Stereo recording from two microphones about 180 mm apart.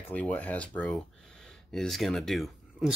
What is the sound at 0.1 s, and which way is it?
Speech, 5° left (ahead or behind).